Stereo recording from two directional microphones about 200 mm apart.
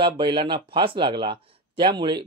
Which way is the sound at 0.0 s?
25° right (ahead or behind).